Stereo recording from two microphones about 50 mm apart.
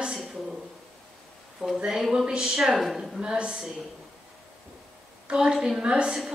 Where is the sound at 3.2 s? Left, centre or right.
Centre.